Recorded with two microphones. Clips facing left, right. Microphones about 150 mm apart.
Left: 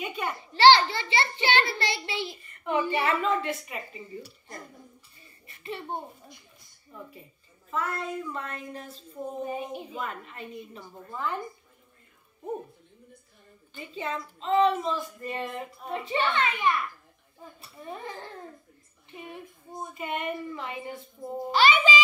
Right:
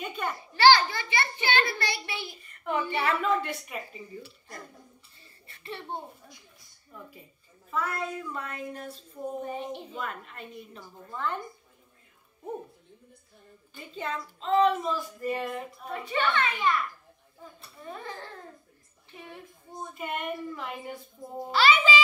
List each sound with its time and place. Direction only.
0.0 s a woman's voice: 5° left (ahead or behind)
0.5 s a child's voice: 25° left (ahead or behind)
2.4 s a child's voice: centre (ahead or behind)
5.5 s a child's voice: 20° left (ahead or behind)
7.7 s a woman's voice: centre (ahead or behind)
9.4 s a sound: 10° left (ahead or behind)
9.8 s a woman's voice: centre (ahead or behind)
13.7 s a woman's voice: centre (ahead or behind)
15.8 s a child's voice: 25° left (ahead or behind)
17.8 s a child's voice: 20° left (ahead or behind)
19.9 s a woman's voice: centre (ahead or behind)
21.5 s a child's voice: 20° left (ahead or behind)